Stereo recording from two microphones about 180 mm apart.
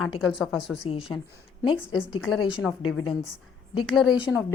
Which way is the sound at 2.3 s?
5° right (ahead or behind).